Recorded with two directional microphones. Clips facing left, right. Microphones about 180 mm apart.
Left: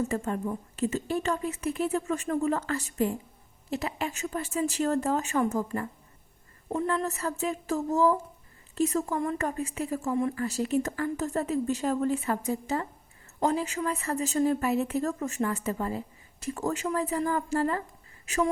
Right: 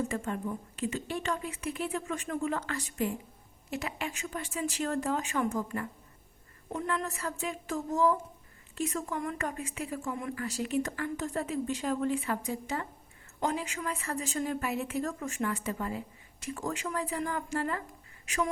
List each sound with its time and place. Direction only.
0.1 s speech: 35° left (ahead or behind)